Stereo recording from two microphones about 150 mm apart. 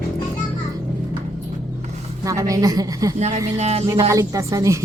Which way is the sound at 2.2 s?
20° right (ahead or behind).